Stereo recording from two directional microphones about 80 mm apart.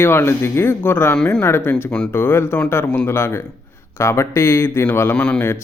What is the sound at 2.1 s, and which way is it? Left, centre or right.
Speech, left.